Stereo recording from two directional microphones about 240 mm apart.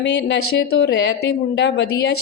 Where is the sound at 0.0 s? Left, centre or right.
Left.